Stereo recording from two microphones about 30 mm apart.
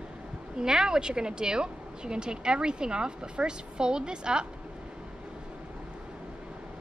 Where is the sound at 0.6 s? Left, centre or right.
Right.